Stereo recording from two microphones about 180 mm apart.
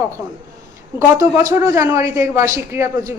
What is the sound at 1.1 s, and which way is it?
Speech, 15° right (ahead or behind).